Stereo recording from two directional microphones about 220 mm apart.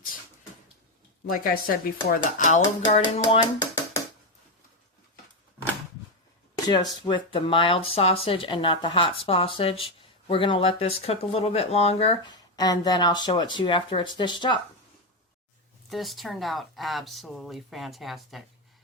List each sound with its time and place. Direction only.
1.3 s dishes: 40° left (ahead or behind)
2.8 s speech: 30° left (ahead or behind)
7.0 s speech: 20° left (ahead or behind)
15.9 s speech: centre (ahead or behind)